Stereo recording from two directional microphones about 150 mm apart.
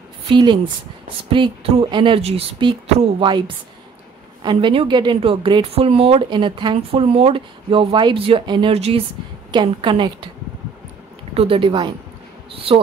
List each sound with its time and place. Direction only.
0.3 s a woman's voice: 30° right (ahead or behind)
11.3 s a woman's voice: 35° right (ahead or behind)